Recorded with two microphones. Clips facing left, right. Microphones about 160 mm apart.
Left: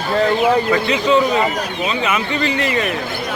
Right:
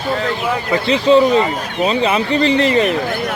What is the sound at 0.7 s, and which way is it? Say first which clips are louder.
Speech: right 3 dB; 30° right (ahead or behind).